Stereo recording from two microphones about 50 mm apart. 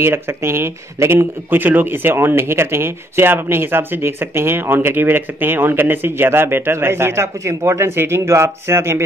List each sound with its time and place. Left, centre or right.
0.0 s speech: right
1.5 s speech: right